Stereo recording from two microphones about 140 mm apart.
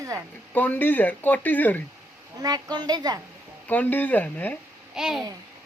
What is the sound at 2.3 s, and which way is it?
Speech, 25° right (ahead or behind).